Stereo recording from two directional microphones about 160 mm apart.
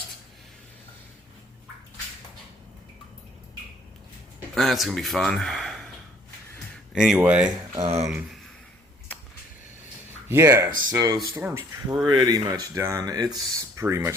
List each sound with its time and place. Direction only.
4.5 s speech: centre (ahead or behind)
7.2 s speech: 5° right (ahead or behind)
7.8 s speech: 40° right (ahead or behind)
10.2 s speech: 15° right (ahead or behind)